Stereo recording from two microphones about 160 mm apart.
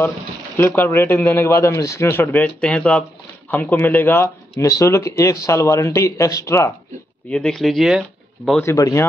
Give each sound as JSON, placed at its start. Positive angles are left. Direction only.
{"t": 0.6, "sound": "speech", "side_deg": 15}
{"t": 7.2, "sound": "speech", "side_deg": 5}
{"t": 8.6, "sound": "speech", "side_deg": 20}